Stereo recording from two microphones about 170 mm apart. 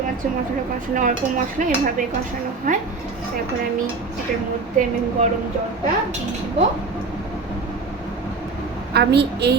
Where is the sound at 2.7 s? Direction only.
50° right (ahead or behind).